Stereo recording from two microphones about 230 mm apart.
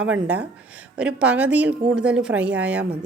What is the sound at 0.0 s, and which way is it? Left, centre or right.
A woman's voice, centre.